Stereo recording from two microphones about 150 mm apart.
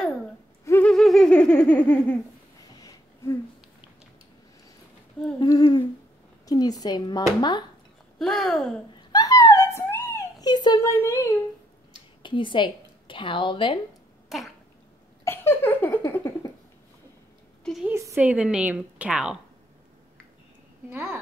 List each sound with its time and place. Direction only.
0.7 s laughter: 10° left (ahead or behind)
2.8 s a sound: 20° left (ahead or behind)
5.4 s humming: 30° left (ahead or behind)
6.4 s speech: 25° left (ahead or behind)
8.2 s a sound: centre (ahead or behind)
8.9 s a sound: 25° left (ahead or behind)
10.4 s speech: 30° left (ahead or behind)
12.2 s a woman's voice: 35° left (ahead or behind)
14.3 s a sound: centre (ahead or behind)
15.2 s laughter: 15° left (ahead or behind)
17.8 s a woman's voice: 15° right (ahead or behind)
20.9 s a woman's voice: 15° right (ahead or behind)